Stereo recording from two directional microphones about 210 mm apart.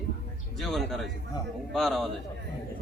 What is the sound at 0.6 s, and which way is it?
A man's voice, centre (ahead or behind).